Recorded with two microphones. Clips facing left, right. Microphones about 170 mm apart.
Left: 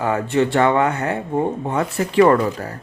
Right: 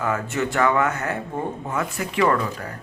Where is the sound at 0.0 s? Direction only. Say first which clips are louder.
Left 6 dB; 30° left (ahead or behind).